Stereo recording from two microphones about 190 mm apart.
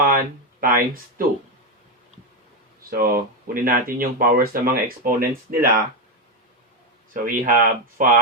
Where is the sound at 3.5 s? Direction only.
50° right (ahead or behind).